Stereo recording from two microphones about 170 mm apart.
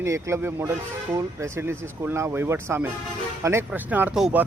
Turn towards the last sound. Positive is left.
turn(degrees=-5)  # may be behind; listen again after turning